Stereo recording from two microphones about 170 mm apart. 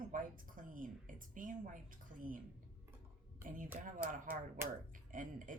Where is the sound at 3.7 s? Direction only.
50° right (ahead or behind).